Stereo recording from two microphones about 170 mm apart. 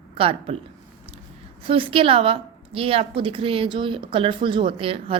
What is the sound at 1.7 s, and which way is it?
Speech, 30° right (ahead or behind).